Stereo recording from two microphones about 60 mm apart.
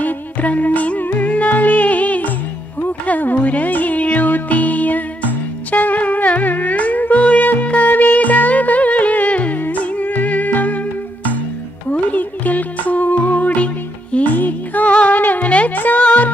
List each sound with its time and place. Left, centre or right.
0.0 s music: left
11.9 s music: left